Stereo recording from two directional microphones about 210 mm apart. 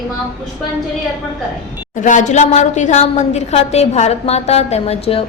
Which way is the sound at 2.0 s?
35° left (ahead or behind).